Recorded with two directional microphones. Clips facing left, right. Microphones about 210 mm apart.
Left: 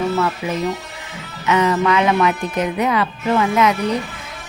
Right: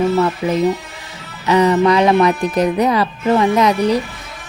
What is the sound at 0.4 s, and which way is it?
Speech, 35° right (ahead or behind).